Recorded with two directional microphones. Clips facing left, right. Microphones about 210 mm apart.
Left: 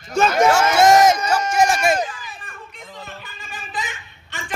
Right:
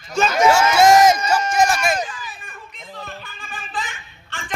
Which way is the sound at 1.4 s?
10° left (ahead or behind).